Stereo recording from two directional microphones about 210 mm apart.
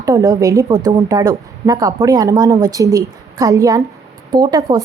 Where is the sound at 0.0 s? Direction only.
15° right (ahead or behind).